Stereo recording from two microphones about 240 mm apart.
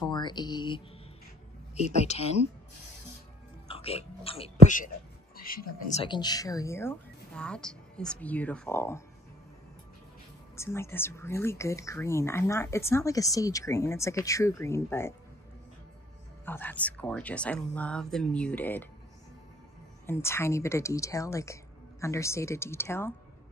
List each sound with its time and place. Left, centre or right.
0.0 s a woman's voice: centre
3.6 s speech: left
6.0 s speech: centre
10.5 s speech: centre
16.4 s speech: centre
20.1 s speech: centre